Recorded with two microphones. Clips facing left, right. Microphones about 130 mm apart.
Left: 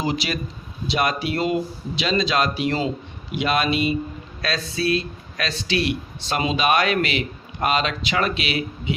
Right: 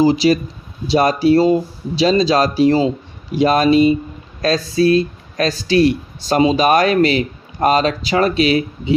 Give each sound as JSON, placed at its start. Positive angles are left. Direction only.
{"t": 0.0, "sound": "speech", "side_deg": -35}